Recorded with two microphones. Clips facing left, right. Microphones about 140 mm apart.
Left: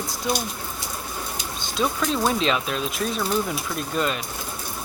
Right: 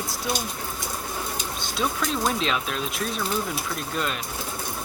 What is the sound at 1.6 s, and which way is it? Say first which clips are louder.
Speech: left 3 dB; centre (ahead or behind).